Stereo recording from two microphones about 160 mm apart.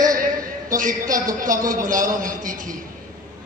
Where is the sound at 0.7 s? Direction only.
55° right (ahead or behind).